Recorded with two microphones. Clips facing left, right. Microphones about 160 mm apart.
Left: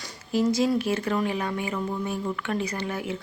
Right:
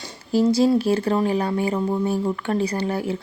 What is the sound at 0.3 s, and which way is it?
Speech, 35° right (ahead or behind).